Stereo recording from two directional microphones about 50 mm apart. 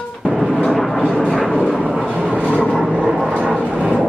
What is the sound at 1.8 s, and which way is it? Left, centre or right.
Vehicle, right.